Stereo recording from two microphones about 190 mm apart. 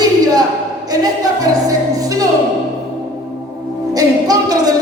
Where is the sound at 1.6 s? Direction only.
20° right (ahead or behind).